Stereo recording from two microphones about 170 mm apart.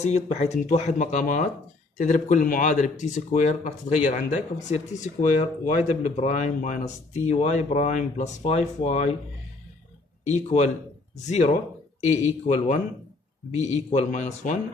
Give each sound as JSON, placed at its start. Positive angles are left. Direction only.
{"t": 0.0, "sound": "speech", "side_deg": 40}
{"t": 10.2, "sound": "speech", "side_deg": 40}